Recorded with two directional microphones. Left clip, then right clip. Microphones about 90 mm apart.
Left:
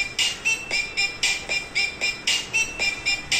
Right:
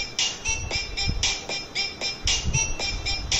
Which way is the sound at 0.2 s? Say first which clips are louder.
Left 3 dB; 30° right (ahead or behind).